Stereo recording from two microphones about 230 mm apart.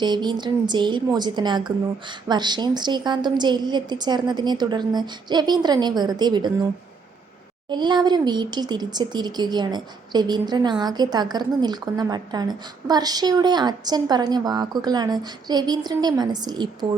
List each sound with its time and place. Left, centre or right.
0.0 s a woman's voice: centre
7.7 s speech: centre